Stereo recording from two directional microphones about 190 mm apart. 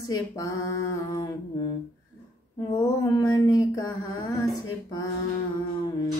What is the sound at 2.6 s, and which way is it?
Mantra, 25° left (ahead or behind).